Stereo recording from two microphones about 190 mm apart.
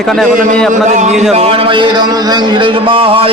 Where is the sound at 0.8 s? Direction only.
40° right (ahead or behind).